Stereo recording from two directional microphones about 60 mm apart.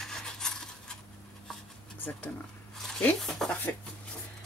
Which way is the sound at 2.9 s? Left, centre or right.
Centre.